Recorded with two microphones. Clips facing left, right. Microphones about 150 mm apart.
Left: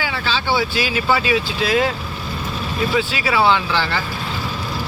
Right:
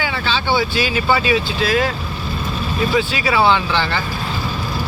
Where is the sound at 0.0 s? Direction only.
5° left (ahead or behind).